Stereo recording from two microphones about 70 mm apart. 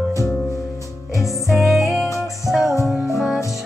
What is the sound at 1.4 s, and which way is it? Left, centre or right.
Music, centre.